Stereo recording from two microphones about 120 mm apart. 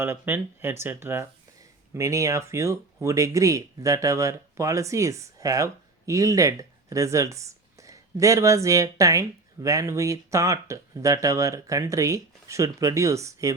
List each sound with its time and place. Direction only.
0.0 s speech: 20° right (ahead or behind)